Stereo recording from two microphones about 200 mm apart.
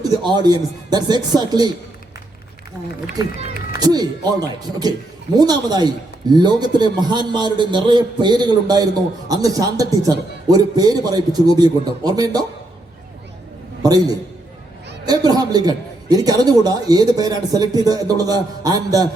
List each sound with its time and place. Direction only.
0.0 s a man's voice: 20° right (ahead or behind)
3.7 s a man's voice: 20° right (ahead or behind)
13.8 s a man's voice: 20° right (ahead or behind)